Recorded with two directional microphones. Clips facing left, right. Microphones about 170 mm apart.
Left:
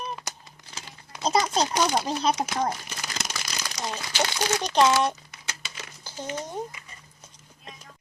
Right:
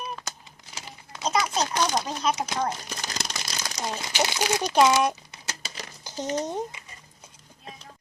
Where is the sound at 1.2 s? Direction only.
30° left (ahead or behind).